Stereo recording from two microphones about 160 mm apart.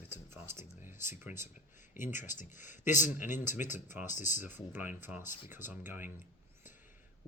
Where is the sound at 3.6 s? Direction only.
50° left (ahead or behind).